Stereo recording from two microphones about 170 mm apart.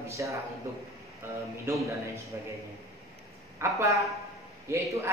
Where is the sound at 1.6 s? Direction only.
15° right (ahead or behind).